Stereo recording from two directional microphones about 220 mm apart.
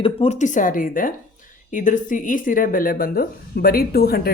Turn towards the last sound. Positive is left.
turn(degrees=45)  # may be behind; listen again after turning